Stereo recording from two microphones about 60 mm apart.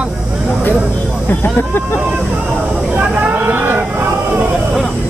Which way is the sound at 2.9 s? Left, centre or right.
Right.